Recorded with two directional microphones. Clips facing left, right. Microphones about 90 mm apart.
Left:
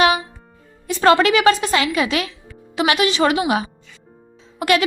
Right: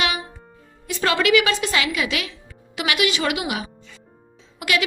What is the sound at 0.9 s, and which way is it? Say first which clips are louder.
A woman's voice: left 5 dB; 40° left (ahead or behind).